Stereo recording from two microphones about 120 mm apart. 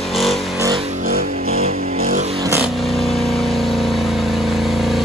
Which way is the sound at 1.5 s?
60° right (ahead or behind).